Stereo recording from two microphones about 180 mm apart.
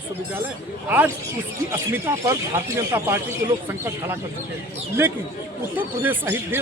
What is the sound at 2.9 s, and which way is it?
Speech, 15° right (ahead or behind).